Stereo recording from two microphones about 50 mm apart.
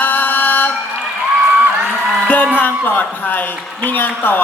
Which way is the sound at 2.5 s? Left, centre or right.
Left.